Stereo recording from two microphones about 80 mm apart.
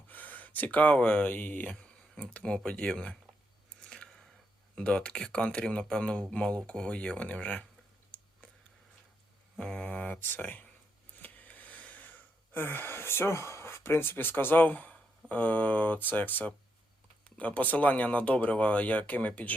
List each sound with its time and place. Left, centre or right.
0.1 s speech: left
1.7 s speech: centre
3.8 s chewing: centre
4.7 s speech: centre
8.1 s a sound: centre
9.6 s speech: centre
11.2 s a sound: left
15.3 s speech: centre